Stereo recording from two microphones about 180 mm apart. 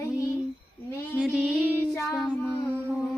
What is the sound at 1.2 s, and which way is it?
Music, 5° right (ahead or behind).